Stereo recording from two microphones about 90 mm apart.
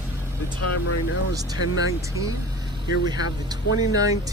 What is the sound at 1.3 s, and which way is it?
Speech, 40° right (ahead or behind).